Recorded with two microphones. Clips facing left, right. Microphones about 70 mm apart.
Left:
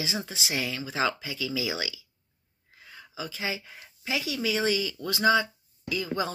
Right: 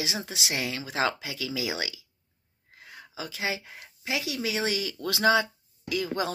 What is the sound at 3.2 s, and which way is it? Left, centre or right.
Speech, right.